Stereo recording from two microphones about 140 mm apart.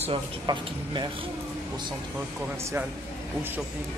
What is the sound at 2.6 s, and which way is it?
Speech, 20° right (ahead or behind).